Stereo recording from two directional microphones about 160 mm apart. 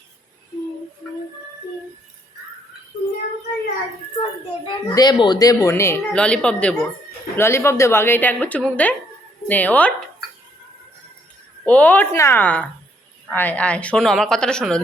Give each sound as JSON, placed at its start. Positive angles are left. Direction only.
{"t": 4.1, "sound": "speech", "side_deg": 35}
{"t": 11.6, "sound": "speech", "side_deg": 10}